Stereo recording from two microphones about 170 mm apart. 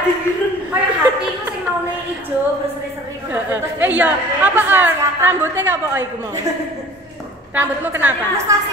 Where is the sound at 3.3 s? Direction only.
10° right (ahead or behind).